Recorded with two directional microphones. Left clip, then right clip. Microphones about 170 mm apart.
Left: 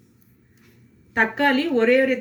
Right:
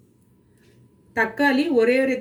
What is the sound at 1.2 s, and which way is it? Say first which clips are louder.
Speech: left 1 dB; 20° left (ahead or behind).